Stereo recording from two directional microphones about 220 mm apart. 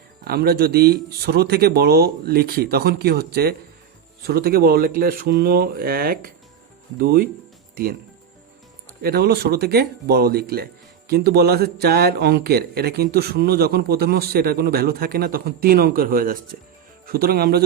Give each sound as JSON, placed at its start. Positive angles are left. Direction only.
{"t": 0.3, "sound": "speech", "side_deg": -45}
{"t": 9.0, "sound": "speech", "side_deg": -45}